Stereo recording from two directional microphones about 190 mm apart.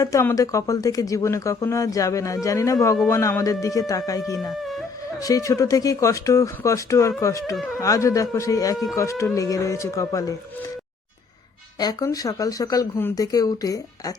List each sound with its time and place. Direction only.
0.0 s speech: 15° left (ahead or behind)
11.8 s speech: 20° left (ahead or behind)